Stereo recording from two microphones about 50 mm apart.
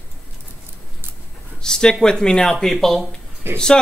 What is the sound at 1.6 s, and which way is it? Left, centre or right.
Speech, centre.